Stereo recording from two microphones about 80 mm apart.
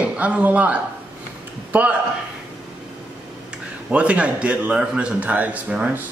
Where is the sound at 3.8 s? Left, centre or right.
Centre.